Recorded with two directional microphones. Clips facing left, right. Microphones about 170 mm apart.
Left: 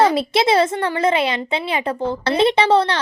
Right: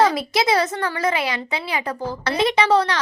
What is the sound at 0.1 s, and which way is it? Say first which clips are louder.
A woman's voice: left 3 dB; 30° left (ahead or behind).